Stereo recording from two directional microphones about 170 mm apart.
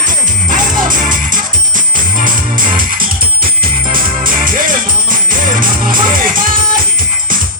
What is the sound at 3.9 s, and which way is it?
Music, 55° right (ahead or behind).